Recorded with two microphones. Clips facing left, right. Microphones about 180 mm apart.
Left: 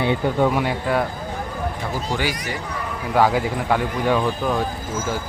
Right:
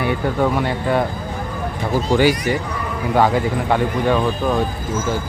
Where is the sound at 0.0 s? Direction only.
25° left (ahead or behind).